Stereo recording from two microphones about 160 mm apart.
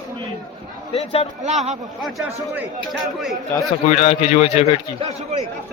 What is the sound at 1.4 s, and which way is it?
Speech, 45° right (ahead or behind).